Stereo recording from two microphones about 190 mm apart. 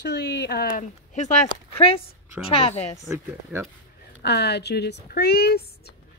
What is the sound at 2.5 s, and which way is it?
Speech, 30° left (ahead or behind).